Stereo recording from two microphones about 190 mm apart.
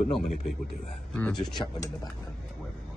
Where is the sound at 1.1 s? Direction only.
5° left (ahead or behind).